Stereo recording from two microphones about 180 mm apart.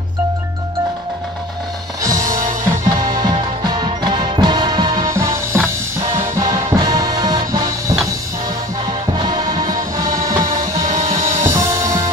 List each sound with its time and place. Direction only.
2.0 s music: 20° right (ahead or behind)
2.3 s music: 50° right (ahead or behind)
3.2 s music: 25° right (ahead or behind)
5.0 s music: 15° right (ahead or behind)